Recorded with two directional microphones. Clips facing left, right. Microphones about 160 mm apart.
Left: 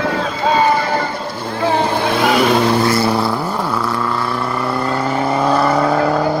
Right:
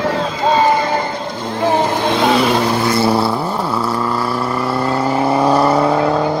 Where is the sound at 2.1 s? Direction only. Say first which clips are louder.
Right 2 dB; 25° right (ahead or behind).